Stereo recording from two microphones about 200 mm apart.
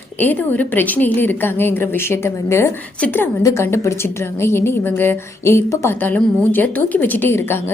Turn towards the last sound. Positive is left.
turn(degrees=10)  # may be behind; listen again after turning